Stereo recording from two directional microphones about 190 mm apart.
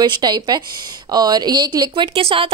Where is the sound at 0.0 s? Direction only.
20° right (ahead or behind).